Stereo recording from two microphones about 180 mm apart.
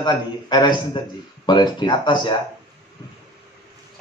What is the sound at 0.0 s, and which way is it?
Speech, 25° left (ahead or behind).